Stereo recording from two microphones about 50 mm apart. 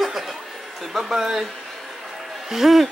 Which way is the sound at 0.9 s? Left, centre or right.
Centre.